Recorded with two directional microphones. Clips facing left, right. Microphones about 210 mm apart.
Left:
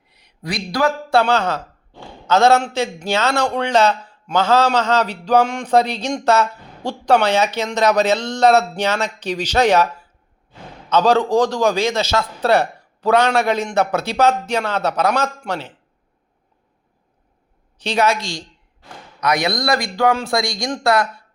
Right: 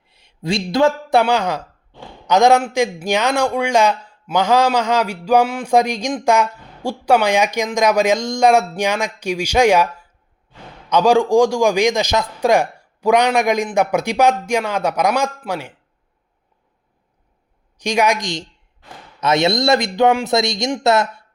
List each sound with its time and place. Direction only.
0.1 s speech: 25° right (ahead or behind)
1.2 s a man's voice: 15° right (ahead or behind)
17.7 s a man's voice: 15° right (ahead or behind)